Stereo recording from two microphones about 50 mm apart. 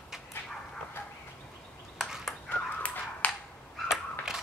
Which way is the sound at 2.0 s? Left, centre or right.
Centre.